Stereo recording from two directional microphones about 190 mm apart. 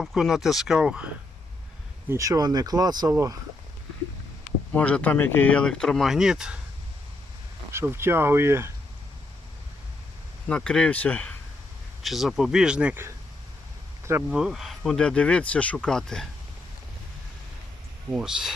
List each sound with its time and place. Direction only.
0.0 s speech: centre (ahead or behind)
2.0 s speech: 15° right (ahead or behind)
4.7 s speech: 5° left (ahead or behind)
7.7 s speech: 15° right (ahead or behind)
10.5 s speech: 5° left (ahead or behind); by 14.3 s 15° right (ahead or behind)
14.3 s speech: 5° right (ahead or behind)
18.1 s speech: 5° right (ahead or behind)